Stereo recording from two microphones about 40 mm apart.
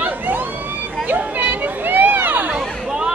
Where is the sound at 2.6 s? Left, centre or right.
Centre.